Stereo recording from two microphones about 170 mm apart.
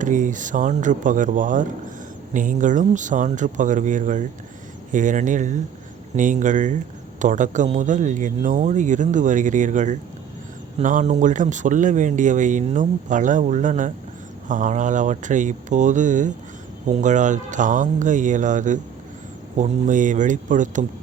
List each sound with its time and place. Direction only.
0.0 s speech: 50° right (ahead or behind)